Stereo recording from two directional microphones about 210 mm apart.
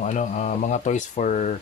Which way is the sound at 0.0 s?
35° left (ahead or behind).